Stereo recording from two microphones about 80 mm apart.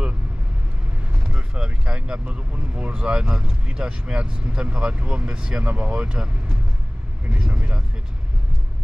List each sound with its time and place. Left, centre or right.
1.2 s speech: centre